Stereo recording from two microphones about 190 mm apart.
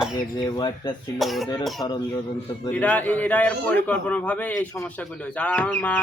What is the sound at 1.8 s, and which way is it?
Speech, 20° left (ahead or behind).